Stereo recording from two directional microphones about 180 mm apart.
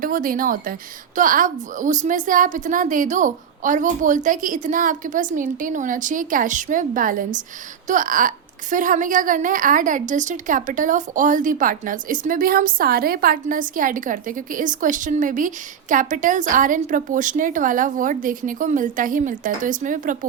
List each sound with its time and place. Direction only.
0.0 s a woman's voice: 50° right (ahead or behind)